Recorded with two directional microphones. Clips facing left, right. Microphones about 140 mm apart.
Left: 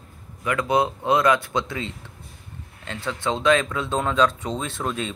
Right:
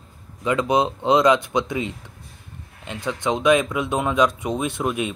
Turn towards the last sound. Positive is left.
turn(degrees=-15)  # may be behind; listen again after turning